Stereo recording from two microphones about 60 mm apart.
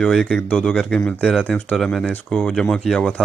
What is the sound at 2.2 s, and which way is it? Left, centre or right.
Speech, centre.